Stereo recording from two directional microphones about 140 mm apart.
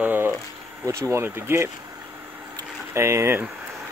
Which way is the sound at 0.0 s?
15° right (ahead or behind).